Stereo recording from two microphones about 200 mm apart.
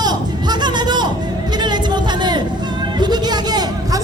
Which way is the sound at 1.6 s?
20° right (ahead or behind).